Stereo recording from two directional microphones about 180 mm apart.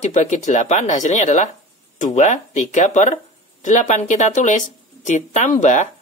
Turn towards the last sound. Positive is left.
turn(degrees=40)  # may be behind; listen again after turning